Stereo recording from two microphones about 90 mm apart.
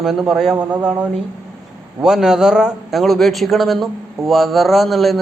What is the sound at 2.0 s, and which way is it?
A man's voice, 5° right (ahead or behind).